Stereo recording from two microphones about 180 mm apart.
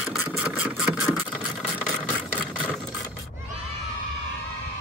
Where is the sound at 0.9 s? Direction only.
20° left (ahead or behind).